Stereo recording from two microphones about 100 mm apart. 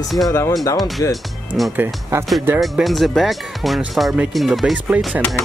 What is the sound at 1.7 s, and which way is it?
Speech, 25° right (ahead or behind).